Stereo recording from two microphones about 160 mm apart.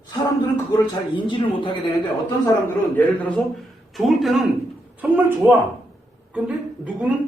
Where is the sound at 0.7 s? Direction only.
30° left (ahead or behind).